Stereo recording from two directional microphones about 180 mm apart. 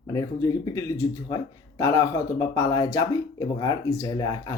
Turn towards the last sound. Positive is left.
turn(degrees=20)  # may be behind; listen again after turning